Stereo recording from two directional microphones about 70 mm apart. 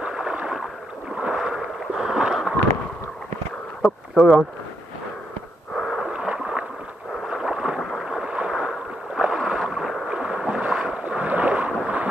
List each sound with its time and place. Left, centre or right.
0.0 s rowboat: centre
3.8 s speech: centre
5.8 s wheeze: centre
6.1 s rowboat: centre
7.2 s boat: centre
8.0 s rowboat: centre
10.1 s boat: centre